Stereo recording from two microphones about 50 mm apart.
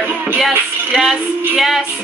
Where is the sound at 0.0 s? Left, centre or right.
Right.